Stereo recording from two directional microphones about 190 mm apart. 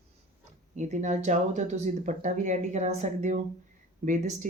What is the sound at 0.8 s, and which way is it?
Speech, 35° right (ahead or behind).